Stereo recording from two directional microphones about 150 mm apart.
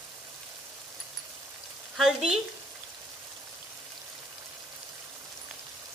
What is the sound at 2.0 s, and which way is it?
Frying, 5° right (ahead or behind).